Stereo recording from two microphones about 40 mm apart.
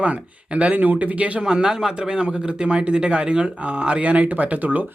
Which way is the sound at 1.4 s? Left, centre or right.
Centre.